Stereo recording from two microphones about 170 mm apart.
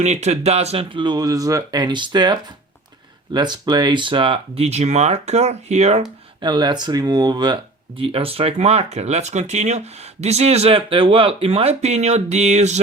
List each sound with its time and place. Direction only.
0.0 s speech: 40° right (ahead or behind)
6.4 s speech: 25° right (ahead or behind); by 12.8 s 40° right (ahead or behind)